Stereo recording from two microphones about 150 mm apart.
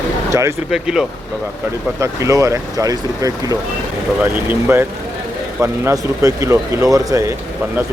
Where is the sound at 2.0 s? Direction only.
20° right (ahead or behind).